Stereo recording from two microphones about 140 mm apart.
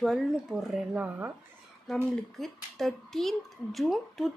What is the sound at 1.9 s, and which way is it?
Speech, centre (ahead or behind).